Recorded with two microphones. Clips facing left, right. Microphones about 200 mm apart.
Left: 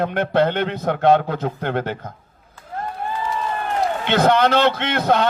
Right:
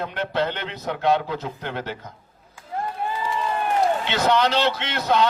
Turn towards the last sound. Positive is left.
turn(degrees=55)  # may be behind; listen again after turning